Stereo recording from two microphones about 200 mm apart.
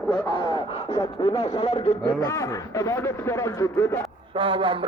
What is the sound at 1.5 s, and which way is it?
Speech, 30° left (ahead or behind).